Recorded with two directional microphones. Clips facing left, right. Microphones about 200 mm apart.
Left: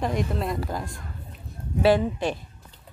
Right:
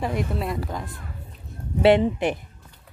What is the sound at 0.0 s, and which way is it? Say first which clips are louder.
A woman's voice: even; 5° right (ahead or behind).